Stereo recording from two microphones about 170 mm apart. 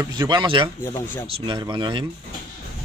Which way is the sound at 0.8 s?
15° left (ahead or behind).